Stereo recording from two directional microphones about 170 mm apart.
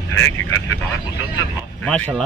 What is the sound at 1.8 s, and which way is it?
Speech, 10° left (ahead or behind).